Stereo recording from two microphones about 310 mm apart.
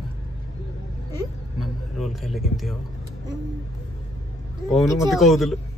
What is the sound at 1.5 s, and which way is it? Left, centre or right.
A man's voice, centre.